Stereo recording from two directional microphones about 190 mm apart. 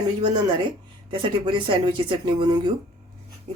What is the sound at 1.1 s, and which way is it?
Speech, 25° right (ahead or behind).